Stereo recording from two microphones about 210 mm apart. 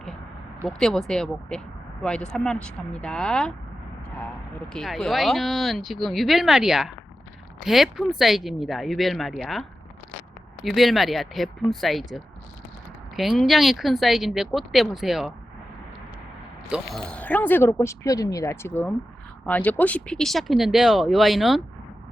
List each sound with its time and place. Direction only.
0.7 s speech: centre (ahead or behind)
4.7 s speech: centre (ahead or behind)
16.6 s speech: centre (ahead or behind)